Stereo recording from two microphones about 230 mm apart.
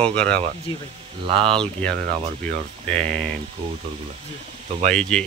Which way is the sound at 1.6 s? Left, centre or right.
Centre.